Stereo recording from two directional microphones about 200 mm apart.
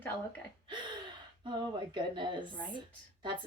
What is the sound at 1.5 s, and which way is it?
Speech, 25° right (ahead or behind).